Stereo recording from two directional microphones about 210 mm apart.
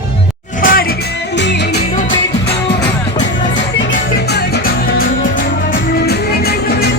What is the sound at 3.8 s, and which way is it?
Music, 60° left (ahead or behind).